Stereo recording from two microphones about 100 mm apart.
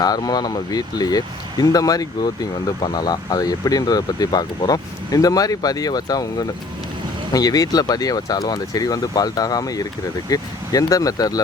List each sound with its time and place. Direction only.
0.0 s speech: 40° left (ahead or behind)